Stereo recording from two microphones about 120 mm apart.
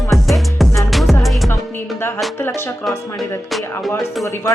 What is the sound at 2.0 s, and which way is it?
Speech, 20° left (ahead or behind).